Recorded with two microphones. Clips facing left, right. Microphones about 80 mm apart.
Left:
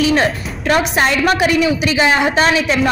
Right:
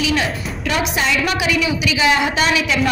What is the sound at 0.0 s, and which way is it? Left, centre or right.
A woman's voice, left.